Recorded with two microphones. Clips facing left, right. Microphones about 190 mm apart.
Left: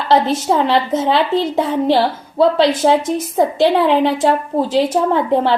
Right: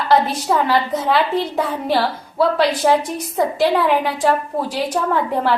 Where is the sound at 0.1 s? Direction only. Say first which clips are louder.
Left 3 dB; 25° left (ahead or behind).